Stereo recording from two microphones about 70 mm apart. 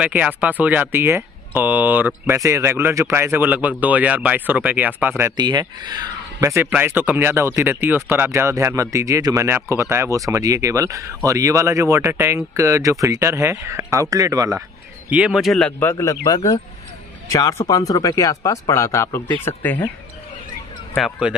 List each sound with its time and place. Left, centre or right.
0.0 s speech: centre
2.3 s speech: right
5.3 s speech: right
6.4 s speech: right
7.3 s speech: right
8.4 s speech: right
9.2 s a man's voice: right
9.5 s speech: right
14.1 s a man's voice: right
15.0 s speech: centre
15.8 s a man's voice: left
17.3 s a man's voice: left
19.2 s speech: left
21.3 s speech: centre